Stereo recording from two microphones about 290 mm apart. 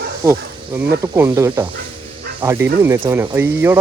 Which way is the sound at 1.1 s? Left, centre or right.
Centre.